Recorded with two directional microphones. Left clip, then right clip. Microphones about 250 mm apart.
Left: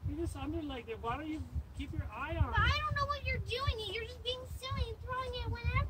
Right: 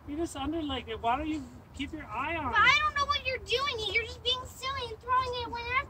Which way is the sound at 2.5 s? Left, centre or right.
Right.